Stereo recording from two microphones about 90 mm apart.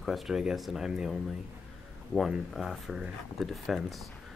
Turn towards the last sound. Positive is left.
turn(degrees=0)  # may be behind; listen again after turning